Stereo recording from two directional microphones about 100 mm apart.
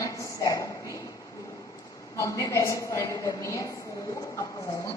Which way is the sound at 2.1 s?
35° left (ahead or behind).